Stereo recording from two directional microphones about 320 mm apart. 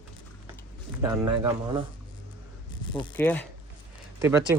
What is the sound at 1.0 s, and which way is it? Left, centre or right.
Speech, centre.